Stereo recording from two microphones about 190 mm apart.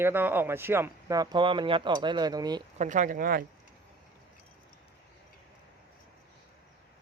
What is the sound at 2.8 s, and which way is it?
Speech, 40° right (ahead or behind).